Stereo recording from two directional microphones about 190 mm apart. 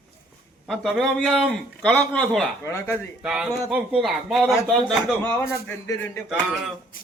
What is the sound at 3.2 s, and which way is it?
A man's voice, 5° right (ahead or behind).